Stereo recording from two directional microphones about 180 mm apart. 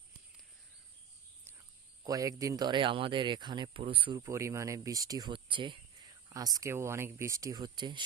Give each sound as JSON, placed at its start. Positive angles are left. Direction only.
{"t": 2.0, "sound": "speech", "side_deg": -20}
{"t": 4.2, "sound": "speech", "side_deg": -15}